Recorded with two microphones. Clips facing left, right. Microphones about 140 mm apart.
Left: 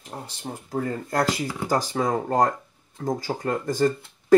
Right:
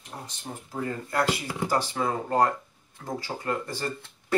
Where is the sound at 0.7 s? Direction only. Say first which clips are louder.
Left 3 dB; 40° left (ahead or behind).